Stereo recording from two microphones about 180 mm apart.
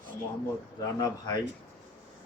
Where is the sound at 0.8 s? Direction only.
20° left (ahead or behind).